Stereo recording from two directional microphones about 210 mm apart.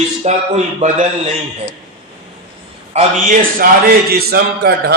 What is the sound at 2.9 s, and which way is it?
A man's voice, 40° right (ahead or behind).